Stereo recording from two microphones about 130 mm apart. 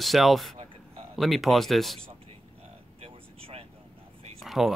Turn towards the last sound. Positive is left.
turn(degrees=0)  # may be behind; listen again after turning